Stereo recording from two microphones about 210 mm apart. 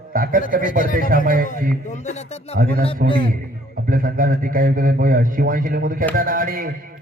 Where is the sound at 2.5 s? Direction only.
45° right (ahead or behind).